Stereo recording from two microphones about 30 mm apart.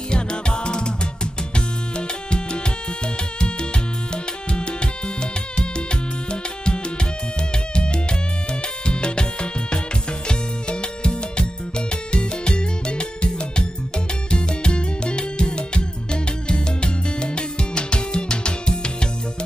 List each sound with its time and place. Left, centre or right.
0.1 s music: left
4.1 s music: left
7.7 s music: left